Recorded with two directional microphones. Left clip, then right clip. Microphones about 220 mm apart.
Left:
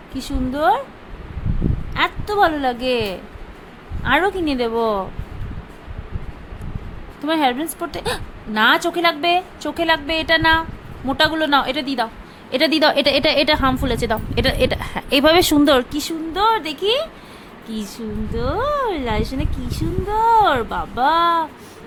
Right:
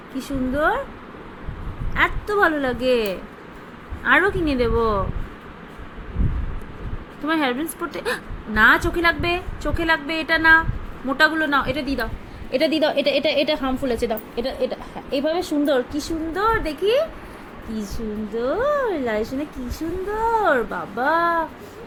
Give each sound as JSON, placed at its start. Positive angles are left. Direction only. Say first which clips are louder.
{"t": 0.2, "sound": "speech", "louder": "left 1 dB", "side_deg": 20}
{"t": 2.0, "sound": "a woman's voice", "louder": "left 2 dB", "side_deg": 15}
{"t": 7.3, "sound": "a woman's voice", "louder": "left 3 dB", "side_deg": 15}
{"t": 14.3, "sound": "a woman's voice", "louder": "left 6 dB", "side_deg": 40}
{"t": 17.7, "sound": "speech", "louder": "left 1 dB", "side_deg": 25}